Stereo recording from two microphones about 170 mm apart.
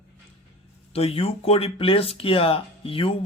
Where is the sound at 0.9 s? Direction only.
35° left (ahead or behind).